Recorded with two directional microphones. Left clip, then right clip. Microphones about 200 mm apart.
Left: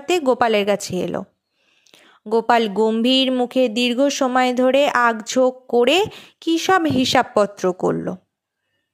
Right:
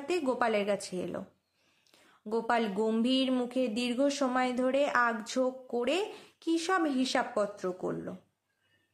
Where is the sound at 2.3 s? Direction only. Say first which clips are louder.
Left 13 dB; 40° left (ahead or behind).